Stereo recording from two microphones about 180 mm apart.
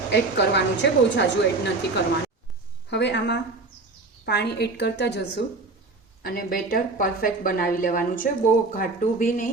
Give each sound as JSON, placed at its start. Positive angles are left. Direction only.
{"t": 0.1, "sound": "a woman's voice", "side_deg": 70}
{"t": 2.9, "sound": "a woman's voice", "side_deg": 75}
{"t": 6.2, "sound": "a woman's voice", "side_deg": 55}